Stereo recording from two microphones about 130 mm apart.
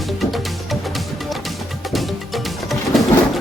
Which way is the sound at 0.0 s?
Centre (ahead or behind).